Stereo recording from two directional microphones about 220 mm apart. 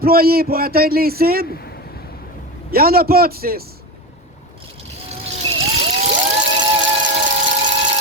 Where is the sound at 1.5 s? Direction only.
45° left (ahead or behind).